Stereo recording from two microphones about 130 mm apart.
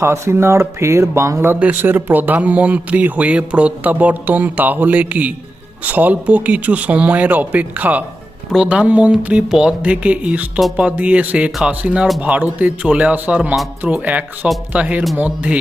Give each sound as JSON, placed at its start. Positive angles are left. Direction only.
{"t": 0.0, "sound": "speech", "side_deg": -20}